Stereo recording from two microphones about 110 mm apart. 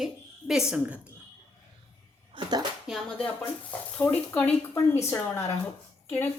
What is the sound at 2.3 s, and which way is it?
Speech, 50° right (ahead or behind).